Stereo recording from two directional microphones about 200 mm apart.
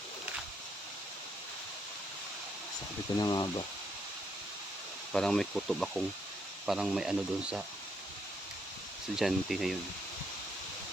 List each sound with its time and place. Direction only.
3.2 s speech: 20° left (ahead or behind)
5.1 s speech: centre (ahead or behind)
9.1 s speech: centre (ahead or behind)